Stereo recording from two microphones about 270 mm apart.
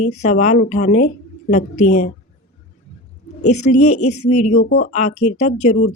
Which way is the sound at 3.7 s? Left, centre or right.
Left.